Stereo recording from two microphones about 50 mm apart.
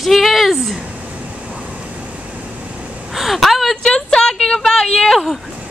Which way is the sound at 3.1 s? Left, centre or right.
Centre.